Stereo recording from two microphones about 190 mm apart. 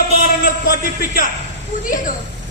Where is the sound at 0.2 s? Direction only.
45° left (ahead or behind).